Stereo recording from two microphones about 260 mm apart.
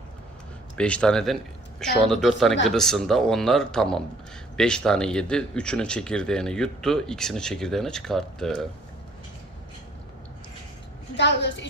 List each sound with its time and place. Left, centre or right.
0.8 s speech: centre
11.2 s a woman's voice: left